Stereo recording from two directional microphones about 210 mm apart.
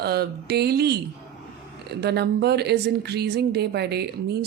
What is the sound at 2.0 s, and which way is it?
Speech, 50° right (ahead or behind).